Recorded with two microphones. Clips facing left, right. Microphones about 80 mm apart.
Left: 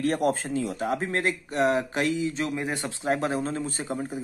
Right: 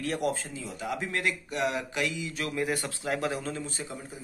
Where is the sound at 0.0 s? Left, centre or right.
Left.